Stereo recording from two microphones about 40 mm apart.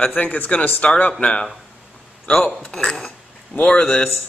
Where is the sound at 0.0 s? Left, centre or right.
Left.